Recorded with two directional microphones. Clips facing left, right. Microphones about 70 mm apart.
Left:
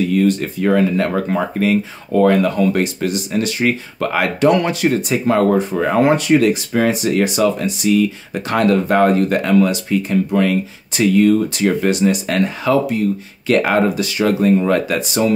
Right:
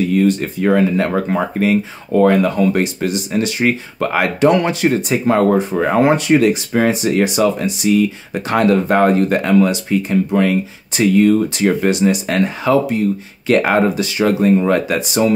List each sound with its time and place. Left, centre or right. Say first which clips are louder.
0.1 s speech: right 1 dB; right